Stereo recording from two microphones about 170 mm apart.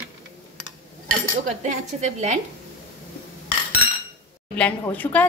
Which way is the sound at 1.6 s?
45° right (ahead or behind).